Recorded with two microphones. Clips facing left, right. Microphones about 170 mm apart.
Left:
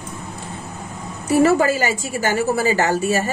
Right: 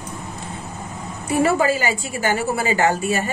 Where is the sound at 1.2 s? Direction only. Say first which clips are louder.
Left 3 dB; 45° left (ahead or behind).